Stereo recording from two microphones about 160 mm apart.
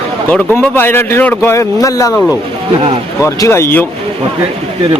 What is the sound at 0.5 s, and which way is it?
A man's voice, 15° left (ahead or behind).